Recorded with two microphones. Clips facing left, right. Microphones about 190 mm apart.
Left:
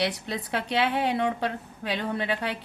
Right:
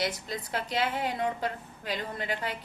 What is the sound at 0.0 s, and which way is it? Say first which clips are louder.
A woman's voice: left 4 dB; 70° left (ahead or behind).